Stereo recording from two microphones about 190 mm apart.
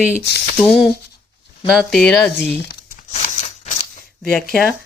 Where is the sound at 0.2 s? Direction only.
60° left (ahead or behind).